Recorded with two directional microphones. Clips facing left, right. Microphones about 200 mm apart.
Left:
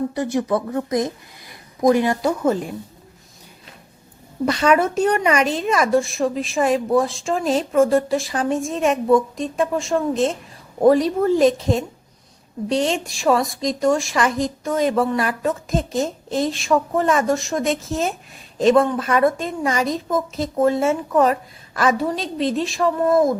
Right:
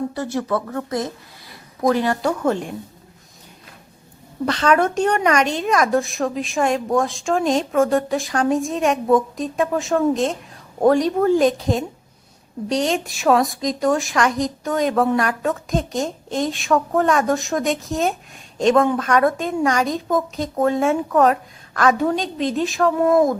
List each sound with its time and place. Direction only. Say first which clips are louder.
0.1 s speech: left 2 dB; 15° left (ahead or behind)
4.4 s a woman's voice: left 1 dB; 10° left (ahead or behind)